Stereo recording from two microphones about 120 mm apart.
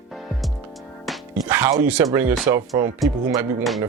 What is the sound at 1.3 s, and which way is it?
Music, 10° right (ahead or behind).